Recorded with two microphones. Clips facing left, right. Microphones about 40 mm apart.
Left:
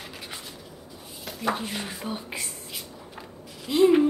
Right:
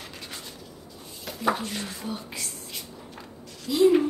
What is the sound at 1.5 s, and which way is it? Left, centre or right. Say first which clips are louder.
Speech: even; centre.